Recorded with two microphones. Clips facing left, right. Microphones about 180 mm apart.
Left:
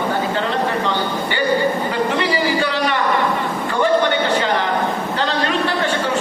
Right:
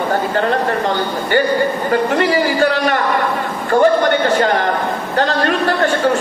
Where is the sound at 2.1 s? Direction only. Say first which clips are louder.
Right 4 dB; 45° right (ahead or behind).